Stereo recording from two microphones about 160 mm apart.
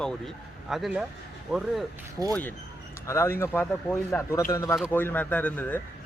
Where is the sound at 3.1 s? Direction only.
15° left (ahead or behind).